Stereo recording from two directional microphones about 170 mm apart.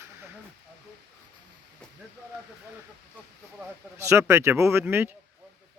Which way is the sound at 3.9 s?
15° right (ahead or behind).